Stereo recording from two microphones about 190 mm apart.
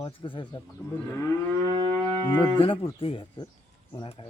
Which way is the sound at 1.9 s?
20° left (ahead or behind).